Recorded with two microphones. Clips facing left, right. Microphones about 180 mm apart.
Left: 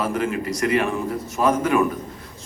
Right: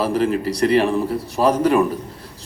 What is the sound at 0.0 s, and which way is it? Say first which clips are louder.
A man's voice: right 5 dB; 35° right (ahead or behind).